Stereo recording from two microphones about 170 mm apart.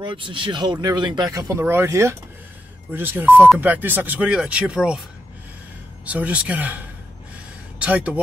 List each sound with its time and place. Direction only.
0.0 s speech: 30° right (ahead or behind); by 5.0 s 5° right (ahead or behind)
6.0 s speech: 10° right (ahead or behind)
7.8 s speech: 5° right (ahead or behind)